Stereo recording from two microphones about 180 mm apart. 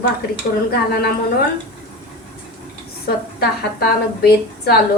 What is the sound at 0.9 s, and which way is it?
Speech, 60° left (ahead or behind).